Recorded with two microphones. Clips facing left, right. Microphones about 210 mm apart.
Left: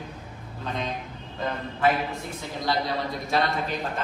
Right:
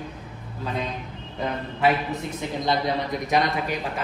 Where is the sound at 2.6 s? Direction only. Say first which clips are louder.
Right 2 dB; 20° right (ahead or behind).